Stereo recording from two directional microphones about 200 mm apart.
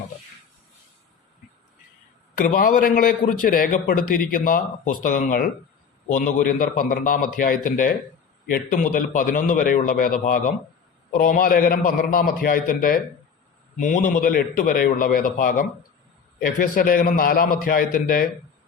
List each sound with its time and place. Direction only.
2.3 s a man's voice: 45° left (ahead or behind)